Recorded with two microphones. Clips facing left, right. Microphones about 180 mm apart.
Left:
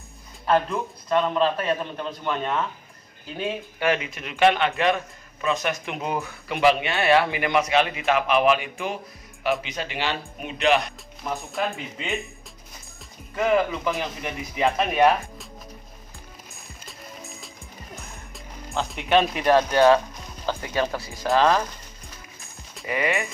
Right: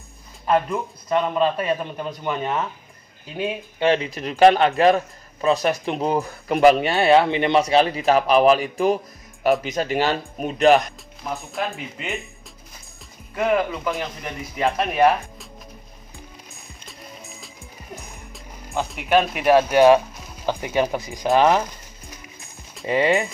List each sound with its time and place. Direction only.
0.5 s a man's voice: 5° right (ahead or behind)
3.8 s speech: 30° right (ahead or behind)
11.2 s a man's voice: centre (ahead or behind)
13.4 s a man's voice: centre (ahead or behind)
16.8 s music: centre (ahead or behind)
18.9 s a man's voice: 5° right (ahead or behind)
22.8 s speech: 30° right (ahead or behind)